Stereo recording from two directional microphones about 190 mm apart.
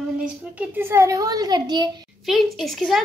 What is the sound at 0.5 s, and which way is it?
A woman's voice, 10° right (ahead or behind).